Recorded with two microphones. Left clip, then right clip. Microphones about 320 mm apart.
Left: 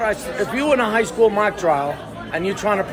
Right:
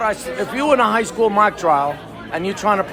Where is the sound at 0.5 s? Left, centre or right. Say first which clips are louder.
Right 3 dB; right.